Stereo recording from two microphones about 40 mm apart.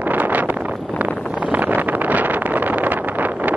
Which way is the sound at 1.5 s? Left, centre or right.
Right.